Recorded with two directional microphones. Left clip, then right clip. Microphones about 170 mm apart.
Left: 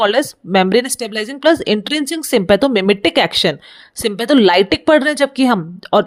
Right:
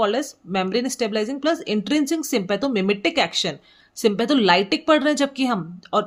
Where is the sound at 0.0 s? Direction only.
50° left (ahead or behind).